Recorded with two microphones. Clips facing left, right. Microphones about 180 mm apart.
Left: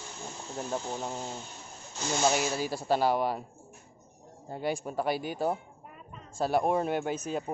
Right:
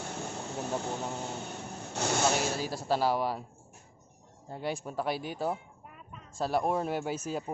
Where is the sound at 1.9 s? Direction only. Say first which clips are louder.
Right 2 dB; 65° right (ahead or behind).